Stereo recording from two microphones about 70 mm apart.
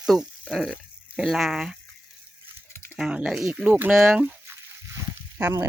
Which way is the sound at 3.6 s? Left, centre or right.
Right.